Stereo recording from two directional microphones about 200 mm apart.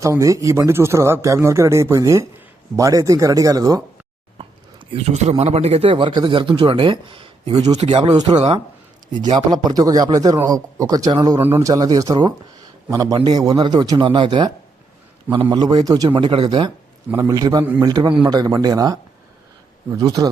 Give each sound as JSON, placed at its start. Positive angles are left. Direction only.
{"t": 0.0, "sound": "speech", "side_deg": -15}
{"t": 4.9, "sound": "speech", "side_deg": -30}
{"t": 9.3, "sound": "speech", "side_deg": -20}